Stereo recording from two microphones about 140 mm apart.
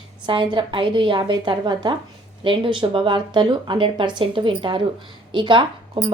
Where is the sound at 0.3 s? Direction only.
35° right (ahead or behind).